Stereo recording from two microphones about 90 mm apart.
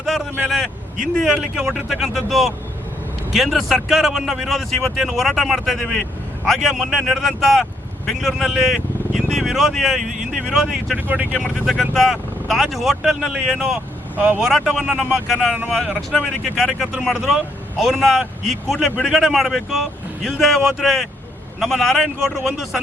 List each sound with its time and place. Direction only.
0.0 s speech: centre (ahead or behind)
10.9 s speech: 20° right (ahead or behind)
11.6 s speech: centre (ahead or behind); by 14.4 s 15° right (ahead or behind)
14.4 s speech: 5° right (ahead or behind)